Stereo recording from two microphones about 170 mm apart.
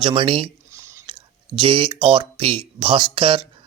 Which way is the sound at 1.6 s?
30° right (ahead or behind).